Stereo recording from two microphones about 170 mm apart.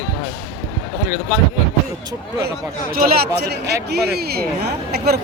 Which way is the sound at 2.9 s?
65° right (ahead or behind).